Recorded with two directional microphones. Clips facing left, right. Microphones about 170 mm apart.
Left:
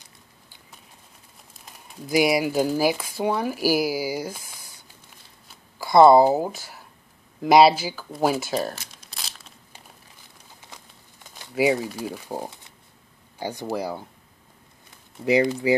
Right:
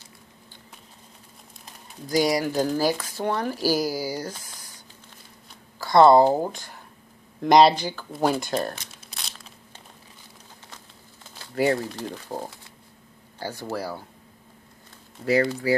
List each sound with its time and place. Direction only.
2.0 s speech: 10° left (ahead or behind)
11.3 s speech: 15° left (ahead or behind)
15.2 s speech: 15° left (ahead or behind)